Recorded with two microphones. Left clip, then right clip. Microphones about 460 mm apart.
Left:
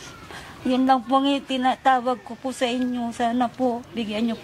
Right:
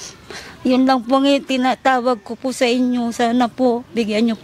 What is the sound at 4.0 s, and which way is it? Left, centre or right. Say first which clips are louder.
Speech: right 8 dB; right.